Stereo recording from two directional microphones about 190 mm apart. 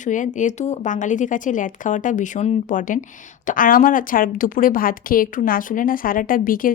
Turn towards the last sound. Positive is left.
turn(degrees=45)  # may be behind; listen again after turning